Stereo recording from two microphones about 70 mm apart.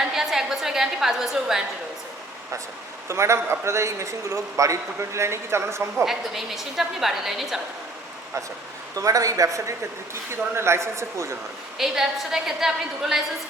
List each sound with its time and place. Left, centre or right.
0.0 s a sound: centre
3.1 s a man's voice: right
6.1 s a woman's voice: centre
9.0 s a man's voice: right
10.5 s a man's voice: right
11.8 s a woman's voice: centre